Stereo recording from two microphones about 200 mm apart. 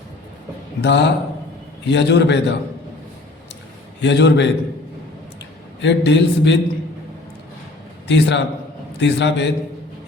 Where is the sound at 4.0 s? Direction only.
60° left (ahead or behind).